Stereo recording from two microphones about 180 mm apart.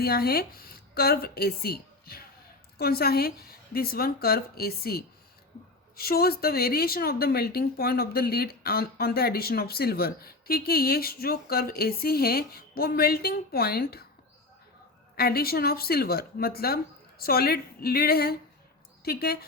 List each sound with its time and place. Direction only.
0.0 s speech: 60° left (ahead or behind)
15.1 s speech: 60° left (ahead or behind)